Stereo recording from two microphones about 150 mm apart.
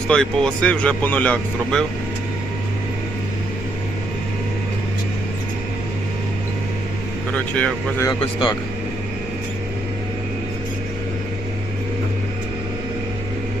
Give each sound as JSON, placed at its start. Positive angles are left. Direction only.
{"t": 0.1, "sound": "speech", "side_deg": 5}
{"t": 7.5, "sound": "speech", "side_deg": 10}
{"t": 8.2, "sound": "speech", "side_deg": 30}